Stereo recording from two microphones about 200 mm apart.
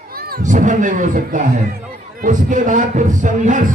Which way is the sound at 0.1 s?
50° right (ahead or behind).